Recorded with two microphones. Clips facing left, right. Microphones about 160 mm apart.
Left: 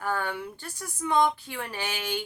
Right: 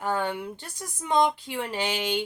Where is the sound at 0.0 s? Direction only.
20° right (ahead or behind).